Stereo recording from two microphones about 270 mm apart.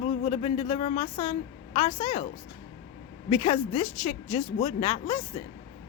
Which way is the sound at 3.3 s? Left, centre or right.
Left.